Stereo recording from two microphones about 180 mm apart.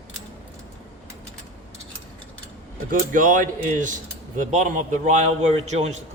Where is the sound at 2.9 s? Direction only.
50° right (ahead or behind).